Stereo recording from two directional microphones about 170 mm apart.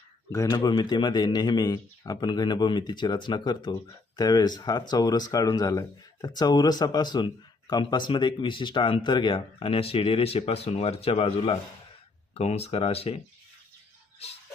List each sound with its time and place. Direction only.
0.3 s speech: 20° left (ahead or behind); by 13.1 s 35° left (ahead or behind)